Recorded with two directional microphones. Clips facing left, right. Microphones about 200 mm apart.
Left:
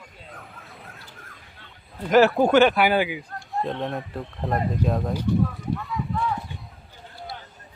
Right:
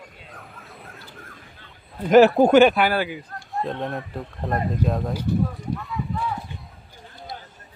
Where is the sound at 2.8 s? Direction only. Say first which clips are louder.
Left 1 dB; 15° left (ahead or behind).